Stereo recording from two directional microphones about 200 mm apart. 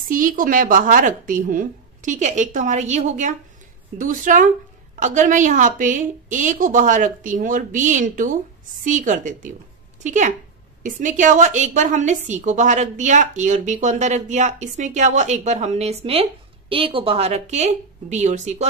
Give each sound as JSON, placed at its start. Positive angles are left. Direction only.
{"t": 0.1, "sound": "a woman's voice", "side_deg": -40}